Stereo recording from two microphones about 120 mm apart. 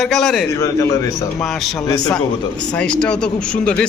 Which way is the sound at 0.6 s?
25° left (ahead or behind).